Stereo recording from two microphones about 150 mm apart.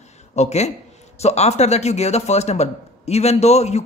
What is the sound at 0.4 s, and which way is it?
Speech, 45° left (ahead or behind).